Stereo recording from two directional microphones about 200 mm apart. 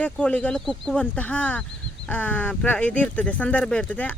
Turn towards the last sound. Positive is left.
turn(degrees=5)  # may be behind; listen again after turning